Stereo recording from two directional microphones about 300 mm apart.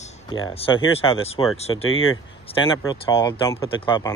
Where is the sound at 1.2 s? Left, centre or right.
Centre.